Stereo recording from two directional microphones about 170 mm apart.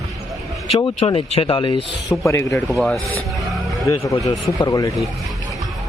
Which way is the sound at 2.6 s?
Centre (ahead or behind).